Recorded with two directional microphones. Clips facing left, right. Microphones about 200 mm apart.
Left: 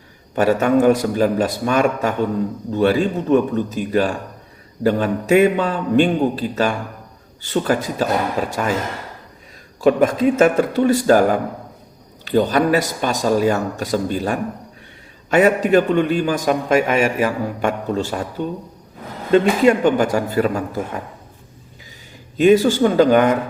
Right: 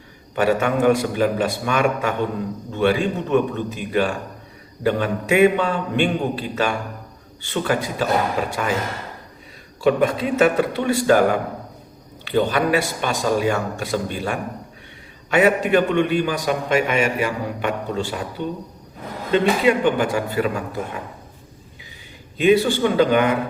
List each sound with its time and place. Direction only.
0.3 s a man's voice: 40° left (ahead or behind)
9.8 s a man's voice: 45° left (ahead or behind)
22.4 s a man's voice: 40° left (ahead or behind)